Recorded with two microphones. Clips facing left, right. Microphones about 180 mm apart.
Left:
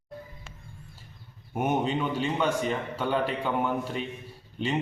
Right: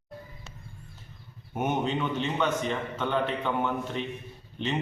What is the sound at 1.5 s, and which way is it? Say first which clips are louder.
A man's voice: left 1 dB; 10° left (ahead or behind).